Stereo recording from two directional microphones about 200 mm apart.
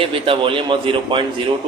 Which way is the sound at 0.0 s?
25° right (ahead or behind).